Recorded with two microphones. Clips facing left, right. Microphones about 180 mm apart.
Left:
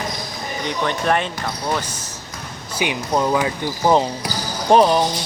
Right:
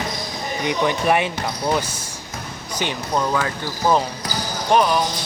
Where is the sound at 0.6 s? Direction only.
10° right (ahead or behind).